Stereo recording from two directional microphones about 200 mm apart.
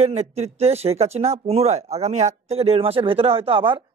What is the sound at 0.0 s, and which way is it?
Speech, 30° right (ahead or behind).